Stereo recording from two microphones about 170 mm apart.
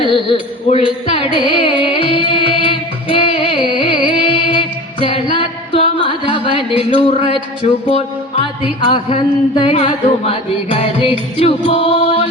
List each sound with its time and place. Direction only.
0.1 s music: 30° left (ahead or behind)
7.6 s speech: 35° left (ahead or behind)